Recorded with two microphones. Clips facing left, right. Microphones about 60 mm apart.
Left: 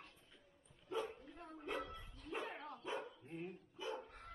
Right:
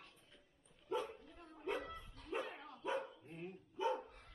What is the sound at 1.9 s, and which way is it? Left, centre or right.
Dog, right.